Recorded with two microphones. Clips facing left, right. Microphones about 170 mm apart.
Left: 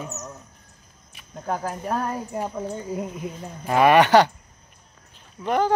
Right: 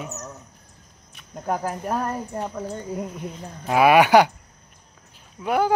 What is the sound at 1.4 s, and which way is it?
Speech, 5° right (ahead or behind).